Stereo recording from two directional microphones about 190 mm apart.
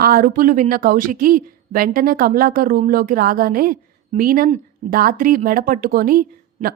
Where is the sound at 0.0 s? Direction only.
50° right (ahead or behind).